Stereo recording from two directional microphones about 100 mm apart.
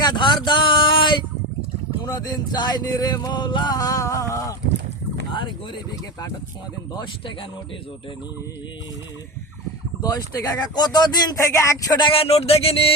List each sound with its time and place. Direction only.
0.0 s a sound: 50° left (ahead or behind)
2.0 s music: 40° left (ahead or behind)
5.3 s speech: 55° left (ahead or behind)
5.9 s music: 40° left (ahead or behind)
6.9 s speech: 55° left (ahead or behind)
10.0 s speech: 40° left (ahead or behind)
11.3 s music: 30° left (ahead or behind)
11.9 s speech: 60° left (ahead or behind)